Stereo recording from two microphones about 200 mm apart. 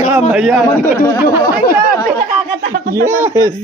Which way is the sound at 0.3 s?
5° right (ahead or behind).